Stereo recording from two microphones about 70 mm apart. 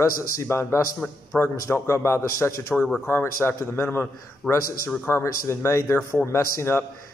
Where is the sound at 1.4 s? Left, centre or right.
Left.